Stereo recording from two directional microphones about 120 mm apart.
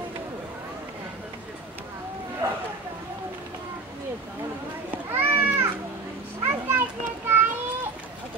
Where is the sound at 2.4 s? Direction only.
20° right (ahead or behind).